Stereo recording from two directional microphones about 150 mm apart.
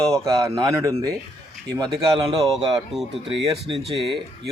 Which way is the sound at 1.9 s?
35° right (ahead or behind).